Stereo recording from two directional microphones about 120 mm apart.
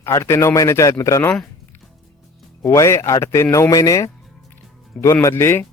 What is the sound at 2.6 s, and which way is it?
Speech, 25° left (ahead or behind).